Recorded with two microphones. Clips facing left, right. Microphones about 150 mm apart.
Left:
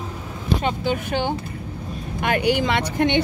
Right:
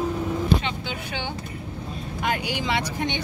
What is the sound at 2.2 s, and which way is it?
Speech, 60° left (ahead or behind).